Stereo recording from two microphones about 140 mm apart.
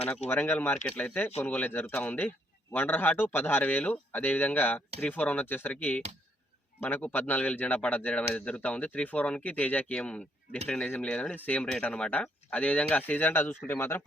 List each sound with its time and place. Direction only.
0.3 s speech: 15° left (ahead or behind)